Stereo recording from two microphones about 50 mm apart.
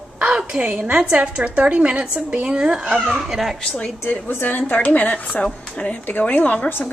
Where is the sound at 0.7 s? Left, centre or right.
Right.